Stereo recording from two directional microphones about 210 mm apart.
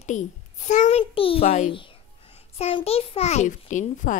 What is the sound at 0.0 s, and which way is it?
A child's voice, 35° left (ahead or behind).